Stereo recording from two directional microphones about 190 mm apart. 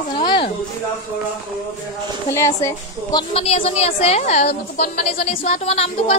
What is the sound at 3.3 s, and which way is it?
A woman's voice, 30° left (ahead or behind).